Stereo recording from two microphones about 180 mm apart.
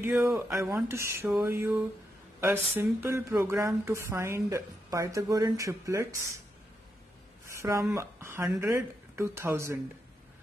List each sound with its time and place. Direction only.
0.0 s speech: 15° right (ahead or behind)
7.4 s speech: 15° right (ahead or behind)